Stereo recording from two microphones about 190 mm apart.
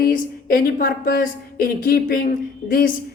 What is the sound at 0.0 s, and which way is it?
A woman's voice, 50° left (ahead or behind).